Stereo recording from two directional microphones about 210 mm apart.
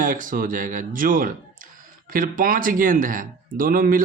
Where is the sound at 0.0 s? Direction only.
40° right (ahead or behind).